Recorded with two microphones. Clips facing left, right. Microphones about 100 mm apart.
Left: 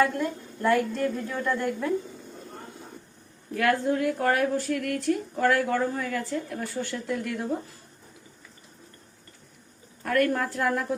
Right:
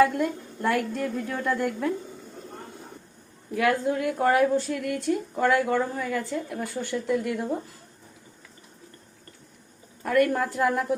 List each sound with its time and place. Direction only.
0.0 s a woman's voice: 5° right (ahead or behind)
3.5 s a woman's voice: 10° right (ahead or behind)
10.0 s a woman's voice: 10° right (ahead or behind)